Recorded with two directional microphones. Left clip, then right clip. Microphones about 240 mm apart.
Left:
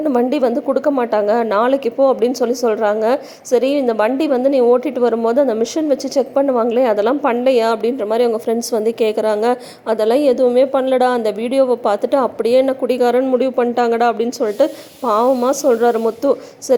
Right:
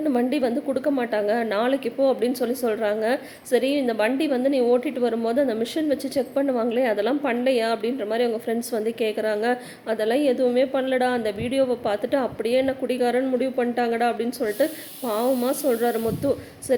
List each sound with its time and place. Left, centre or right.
0.1 s a woman's voice: centre